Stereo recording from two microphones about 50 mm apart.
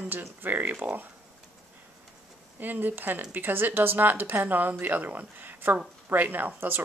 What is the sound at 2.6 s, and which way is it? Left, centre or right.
Speech, right.